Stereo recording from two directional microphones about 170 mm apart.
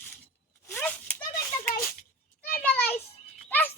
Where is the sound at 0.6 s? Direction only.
10° left (ahead or behind).